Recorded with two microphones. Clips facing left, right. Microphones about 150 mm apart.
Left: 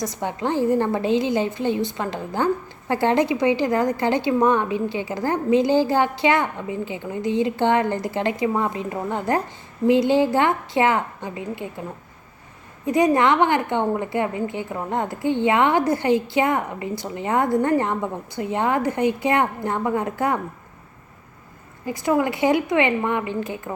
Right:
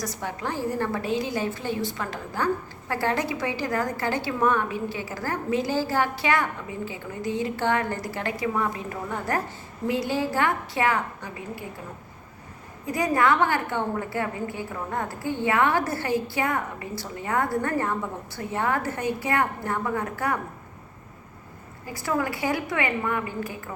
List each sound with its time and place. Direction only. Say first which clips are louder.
0.0 s a woman's voice: left 6 dB; 20° left (ahead or behind)
12.8 s a woman's voice: left 6 dB; 20° left (ahead or behind)
21.8 s a woman's voice: left 6 dB; 20° left (ahead or behind)